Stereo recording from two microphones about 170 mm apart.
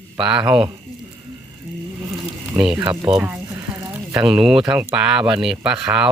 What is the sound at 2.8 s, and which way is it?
Speech, 20° right (ahead or behind).